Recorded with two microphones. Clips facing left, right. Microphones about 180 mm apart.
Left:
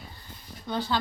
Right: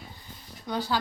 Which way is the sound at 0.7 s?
15° right (ahead or behind).